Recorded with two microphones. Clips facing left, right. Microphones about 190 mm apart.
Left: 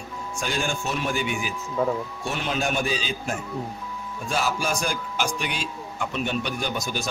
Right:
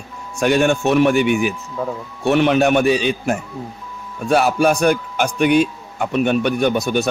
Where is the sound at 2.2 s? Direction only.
65° right (ahead or behind).